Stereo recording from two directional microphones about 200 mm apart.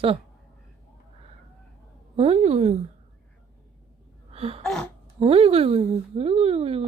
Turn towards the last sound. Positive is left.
turn(degrees=-30)  # may be behind; listen again after turning